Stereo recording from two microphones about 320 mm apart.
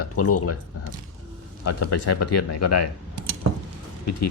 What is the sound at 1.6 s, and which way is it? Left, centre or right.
Speech, left.